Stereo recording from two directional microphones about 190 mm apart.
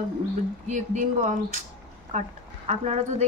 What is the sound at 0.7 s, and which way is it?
Speech, 40° right (ahead or behind).